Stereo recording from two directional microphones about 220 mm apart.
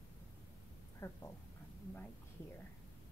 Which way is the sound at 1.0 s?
10° left (ahead or behind).